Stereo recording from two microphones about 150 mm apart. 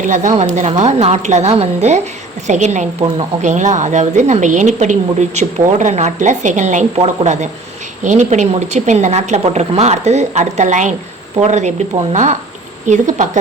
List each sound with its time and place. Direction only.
0.0 s a woman's voice: 55° right (ahead or behind)
8.0 s a woman's voice: 55° right (ahead or behind)